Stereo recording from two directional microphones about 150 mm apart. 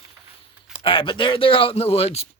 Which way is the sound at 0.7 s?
35° left (ahead or behind).